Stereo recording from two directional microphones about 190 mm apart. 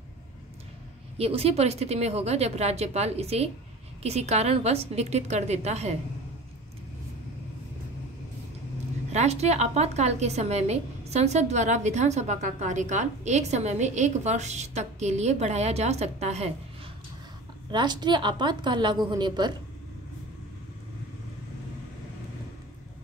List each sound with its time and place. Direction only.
1.1 s a woman's voice: 30° right (ahead or behind)
9.1 s a woman's voice: 35° right (ahead or behind)
17.6 s a woman's voice: 25° right (ahead or behind)